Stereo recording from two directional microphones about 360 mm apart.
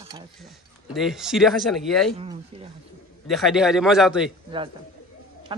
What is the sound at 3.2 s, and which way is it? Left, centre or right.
Speech, centre.